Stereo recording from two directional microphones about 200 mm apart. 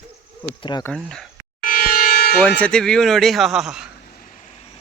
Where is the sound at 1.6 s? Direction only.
45° left (ahead or behind).